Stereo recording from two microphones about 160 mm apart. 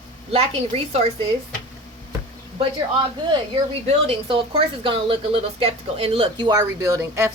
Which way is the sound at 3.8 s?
35° right (ahead or behind).